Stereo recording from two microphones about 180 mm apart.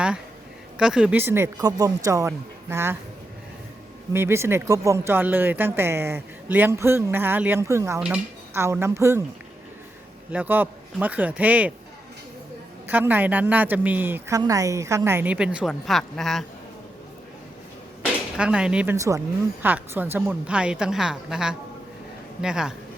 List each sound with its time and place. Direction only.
0.8 s speech: 5° right (ahead or behind)
4.1 s speech: 15° right (ahead or behind)
10.3 s speech: 10° right (ahead or behind)
12.9 s speech: 10° right (ahead or behind)
18.0 s speech: 5° right (ahead or behind)
18.9 s a woman's voice: 15° right (ahead or behind)